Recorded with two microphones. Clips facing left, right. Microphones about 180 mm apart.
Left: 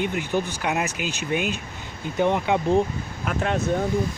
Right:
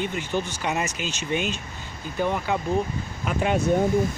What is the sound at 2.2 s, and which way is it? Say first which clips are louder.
Speech: left 4 dB; 20° left (ahead or behind).